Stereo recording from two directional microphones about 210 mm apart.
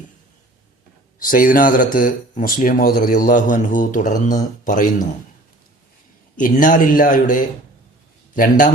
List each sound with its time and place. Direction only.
1.2 s speech: 40° left (ahead or behind)
6.3 s speech: 40° left (ahead or behind)